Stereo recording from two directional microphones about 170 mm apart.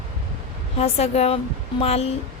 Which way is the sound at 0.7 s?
40° left (ahead or behind).